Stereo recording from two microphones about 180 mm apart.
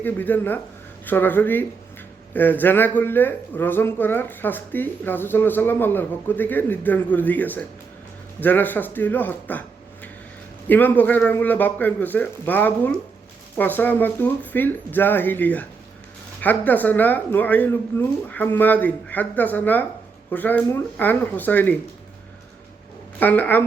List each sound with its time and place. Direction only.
0.0 s speech: 10° left (ahead or behind)
23.2 s speech: 10° left (ahead or behind)